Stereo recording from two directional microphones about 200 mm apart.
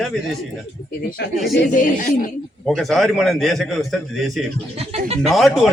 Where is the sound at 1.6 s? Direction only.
45° left (ahead or behind).